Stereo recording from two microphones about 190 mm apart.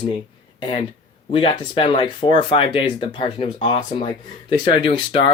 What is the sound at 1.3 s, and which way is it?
Speech, 25° left (ahead or behind).